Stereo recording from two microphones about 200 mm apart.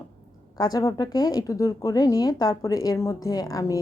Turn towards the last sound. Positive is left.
turn(degrees=15)  # may be behind; listen again after turning